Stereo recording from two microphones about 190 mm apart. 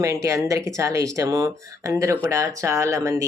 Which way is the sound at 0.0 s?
15° right (ahead or behind).